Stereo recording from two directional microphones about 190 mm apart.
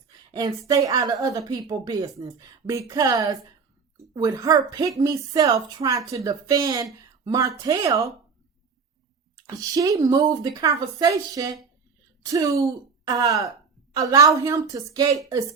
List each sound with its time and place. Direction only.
0.3 s a woman's voice: 20° right (ahead or behind)
9.3 s a woman's voice: 20° right (ahead or behind)